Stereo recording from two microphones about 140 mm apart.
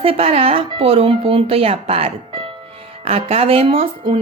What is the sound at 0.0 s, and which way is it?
Speech, 40° right (ahead or behind).